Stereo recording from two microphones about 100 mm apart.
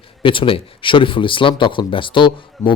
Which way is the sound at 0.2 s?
60° left (ahead or behind).